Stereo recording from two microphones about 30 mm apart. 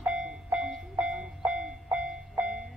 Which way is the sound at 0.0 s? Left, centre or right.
Right.